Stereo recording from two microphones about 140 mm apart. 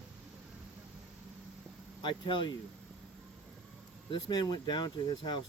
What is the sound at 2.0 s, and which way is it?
Speech, 35° left (ahead or behind).